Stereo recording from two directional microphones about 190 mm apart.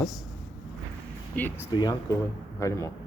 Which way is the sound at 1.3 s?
10° left (ahead or behind).